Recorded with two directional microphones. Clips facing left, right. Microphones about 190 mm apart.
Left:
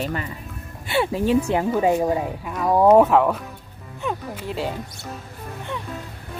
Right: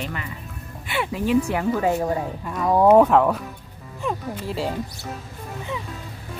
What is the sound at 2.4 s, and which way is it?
Speech, 5° left (ahead or behind).